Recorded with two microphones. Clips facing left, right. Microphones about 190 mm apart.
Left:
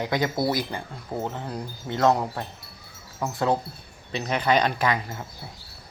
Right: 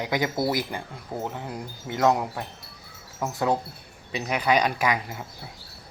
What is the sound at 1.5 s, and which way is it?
Speech, 15° right (ahead or behind).